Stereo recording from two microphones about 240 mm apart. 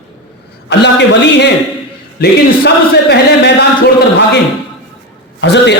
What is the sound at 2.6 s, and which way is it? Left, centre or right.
A man's voice, left.